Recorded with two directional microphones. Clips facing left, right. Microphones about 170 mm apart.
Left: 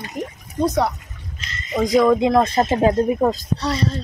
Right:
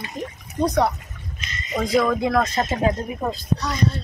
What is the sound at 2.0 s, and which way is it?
A woman's voice, 25° left (ahead or behind).